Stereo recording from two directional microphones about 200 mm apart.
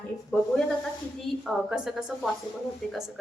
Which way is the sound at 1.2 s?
Centre (ahead or behind).